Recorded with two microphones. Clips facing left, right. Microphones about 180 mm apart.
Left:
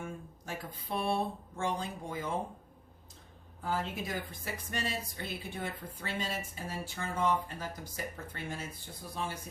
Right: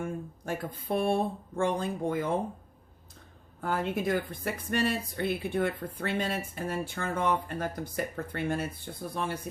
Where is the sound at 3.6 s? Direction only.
60° right (ahead or behind).